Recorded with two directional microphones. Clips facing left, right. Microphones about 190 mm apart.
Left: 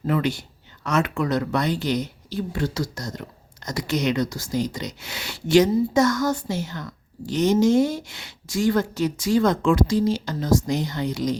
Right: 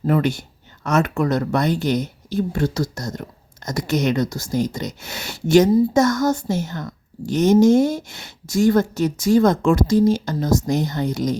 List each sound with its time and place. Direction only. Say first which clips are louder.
0.0 s a woman's voice: right 4 dB; 45° right (ahead or behind)